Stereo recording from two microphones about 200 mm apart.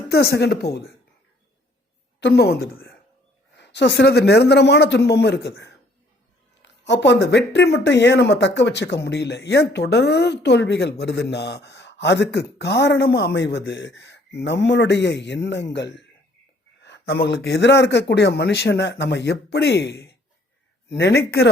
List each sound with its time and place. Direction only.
0.1 s speech: 55° left (ahead or behind)
2.2 s speech: 55° left (ahead or behind)